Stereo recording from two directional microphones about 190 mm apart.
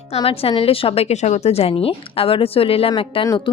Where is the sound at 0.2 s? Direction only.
30° left (ahead or behind).